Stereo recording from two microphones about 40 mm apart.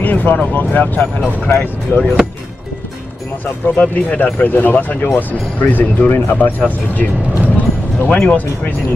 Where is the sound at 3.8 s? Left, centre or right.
Left.